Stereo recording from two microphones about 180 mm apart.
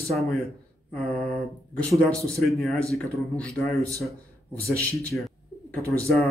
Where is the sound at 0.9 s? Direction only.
5° left (ahead or behind).